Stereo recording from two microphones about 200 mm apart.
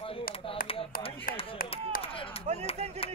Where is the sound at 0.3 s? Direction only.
45° left (ahead or behind).